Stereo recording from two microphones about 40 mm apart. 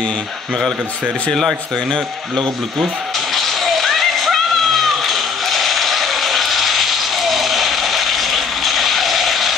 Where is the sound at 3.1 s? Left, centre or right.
Centre.